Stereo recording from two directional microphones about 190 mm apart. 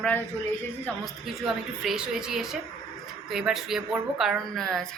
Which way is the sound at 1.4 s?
Centre (ahead or behind).